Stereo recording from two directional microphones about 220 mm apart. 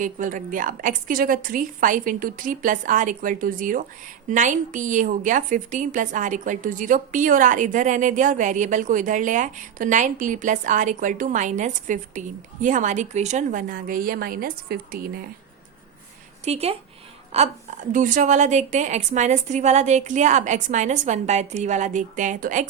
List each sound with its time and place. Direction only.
0.0 s a woman's voice: 35° right (ahead or behind)
16.4 s a woman's voice: 30° right (ahead or behind)